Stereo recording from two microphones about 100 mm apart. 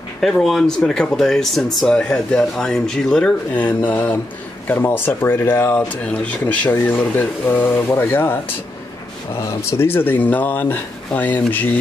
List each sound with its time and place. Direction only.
0.2 s speech: centre (ahead or behind); by 11.8 s 15° left (ahead or behind)